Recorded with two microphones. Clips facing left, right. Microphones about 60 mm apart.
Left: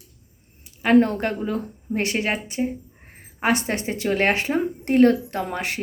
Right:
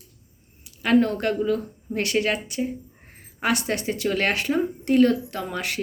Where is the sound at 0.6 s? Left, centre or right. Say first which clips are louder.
Left 3 dB; left.